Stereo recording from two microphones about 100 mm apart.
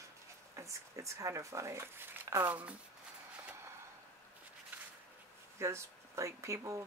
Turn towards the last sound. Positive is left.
turn(degrees=-30)  # may be behind; listen again after turning